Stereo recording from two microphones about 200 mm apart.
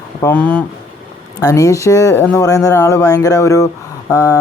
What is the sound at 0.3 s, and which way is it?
Speech, 10° left (ahead or behind).